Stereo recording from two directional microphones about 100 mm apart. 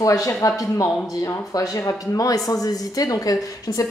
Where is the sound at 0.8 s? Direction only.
Centre (ahead or behind).